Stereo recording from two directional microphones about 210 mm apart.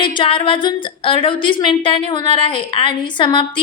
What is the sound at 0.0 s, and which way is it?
A woman's voice, 25° left (ahead or behind).